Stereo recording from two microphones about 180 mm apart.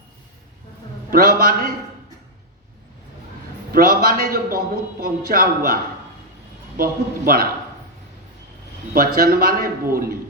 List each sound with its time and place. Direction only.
1.1 s a man's voice: 55° right (ahead or behind)
3.7 s a man's voice: 55° right (ahead or behind)
8.9 s a man's voice: 55° right (ahead or behind)